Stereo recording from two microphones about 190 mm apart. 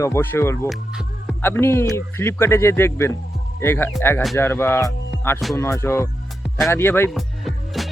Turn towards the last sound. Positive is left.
turn(degrees=0)  # may be behind; listen again after turning